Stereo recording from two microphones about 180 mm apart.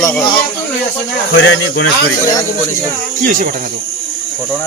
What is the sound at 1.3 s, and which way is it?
Speech, 90° left.